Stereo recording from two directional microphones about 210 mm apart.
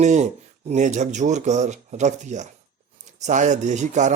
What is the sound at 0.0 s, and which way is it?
Speech, 35° right (ahead or behind).